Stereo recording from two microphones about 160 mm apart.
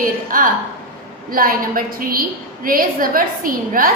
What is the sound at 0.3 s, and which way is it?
A woman's voice, 60° right (ahead or behind).